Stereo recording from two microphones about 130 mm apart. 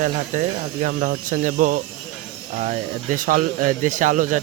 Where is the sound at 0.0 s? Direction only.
70° right (ahead or behind).